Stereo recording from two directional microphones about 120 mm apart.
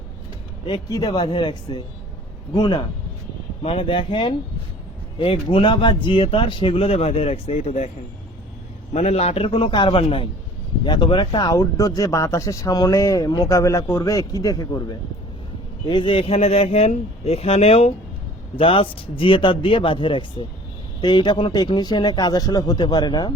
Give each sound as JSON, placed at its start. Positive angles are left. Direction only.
{"t": 0.9, "sound": "speech", "side_deg": 30}
{"t": 3.6, "sound": "speech", "side_deg": 50}
{"t": 8.9, "sound": "speech", "side_deg": 65}
{"t": 10.8, "sound": "speech", "side_deg": 40}
{"t": 11.5, "sound": "speech", "side_deg": 30}
{"t": 15.9, "sound": "speech", "side_deg": 45}
{"t": 18.5, "sound": "speech", "side_deg": 50}